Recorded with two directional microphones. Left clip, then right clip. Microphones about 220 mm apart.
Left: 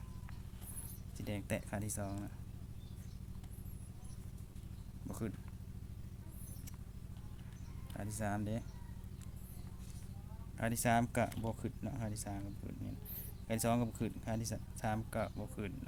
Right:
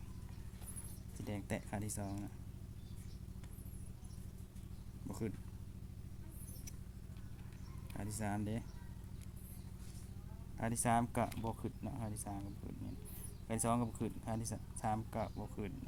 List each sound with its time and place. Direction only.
1.2 s speech: 15° left (ahead or behind)
5.0 s speech: 5° left (ahead or behind)
7.9 s speech: 5° left (ahead or behind)
10.6 s speech: 20° left (ahead or behind)